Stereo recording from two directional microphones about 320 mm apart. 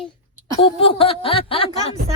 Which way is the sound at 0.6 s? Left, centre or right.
Centre.